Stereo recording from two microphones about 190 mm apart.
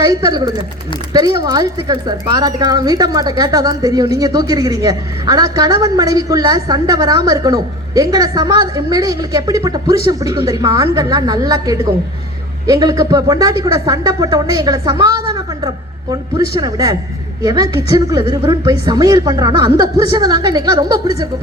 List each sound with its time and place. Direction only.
0.0 s speech: 20° right (ahead or behind)